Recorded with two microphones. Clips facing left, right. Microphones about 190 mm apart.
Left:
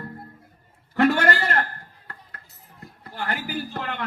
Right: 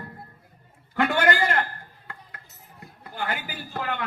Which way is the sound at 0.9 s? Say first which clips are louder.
Left 2 dB; 45° left (ahead or behind).